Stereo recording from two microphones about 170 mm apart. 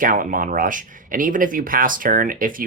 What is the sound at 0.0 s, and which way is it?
Speech, 50° right (ahead or behind).